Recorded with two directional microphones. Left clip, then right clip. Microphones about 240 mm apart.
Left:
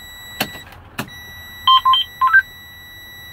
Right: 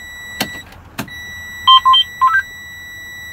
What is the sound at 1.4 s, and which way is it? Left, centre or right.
Beep, left.